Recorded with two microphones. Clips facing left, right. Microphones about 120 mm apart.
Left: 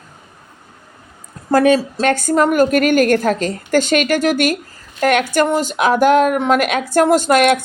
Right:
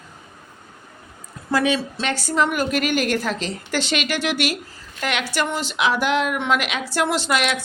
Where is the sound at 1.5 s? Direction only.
45° left (ahead or behind).